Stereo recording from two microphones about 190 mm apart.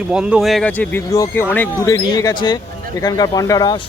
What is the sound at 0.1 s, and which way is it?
Speech, 5° right (ahead or behind).